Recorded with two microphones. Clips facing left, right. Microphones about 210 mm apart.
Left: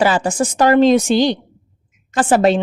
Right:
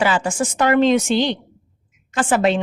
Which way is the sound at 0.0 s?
40° left (ahead or behind).